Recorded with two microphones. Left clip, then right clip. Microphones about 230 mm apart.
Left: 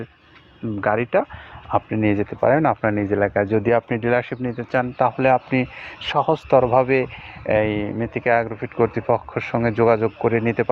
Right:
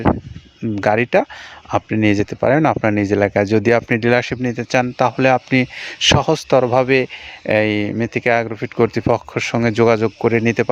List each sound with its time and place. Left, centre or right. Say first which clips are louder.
0.8 s speech: right 4 dB; right